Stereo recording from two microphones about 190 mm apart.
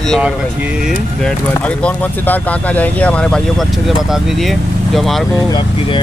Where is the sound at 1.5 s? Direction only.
5° left (ahead or behind).